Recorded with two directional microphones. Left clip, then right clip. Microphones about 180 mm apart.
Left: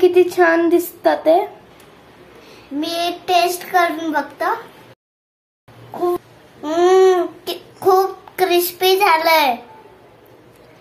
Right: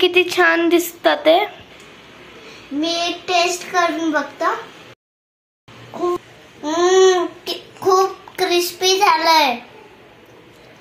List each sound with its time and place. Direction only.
0.0 s a woman's voice: 5° left (ahead or behind)
2.8 s a child's voice: 30° left (ahead or behind)
6.6 s a child's voice: 25° left (ahead or behind)
7.8 s babbling: 5° left (ahead or behind)
8.5 s a child's voice: 25° left (ahead or behind)